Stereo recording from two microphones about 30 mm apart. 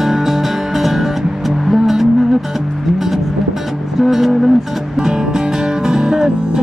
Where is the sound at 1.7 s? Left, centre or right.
Centre.